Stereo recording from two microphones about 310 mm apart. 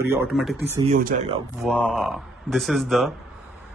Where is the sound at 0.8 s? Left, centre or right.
Right.